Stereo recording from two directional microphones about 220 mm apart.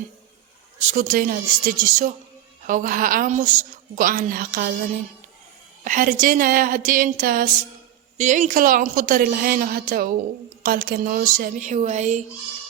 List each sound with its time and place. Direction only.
0.8 s a woman's voice: 35° right (ahead or behind)
5.8 s a woman's voice: 35° right (ahead or behind)